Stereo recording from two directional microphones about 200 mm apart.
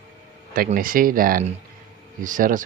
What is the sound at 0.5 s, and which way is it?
Speech, 45° right (ahead or behind).